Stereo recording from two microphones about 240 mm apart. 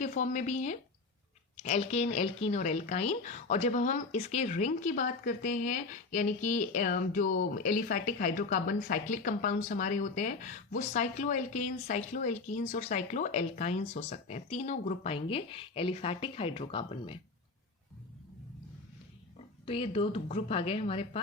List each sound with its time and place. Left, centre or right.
0.0 s speech: left
19.6 s a woman's voice: left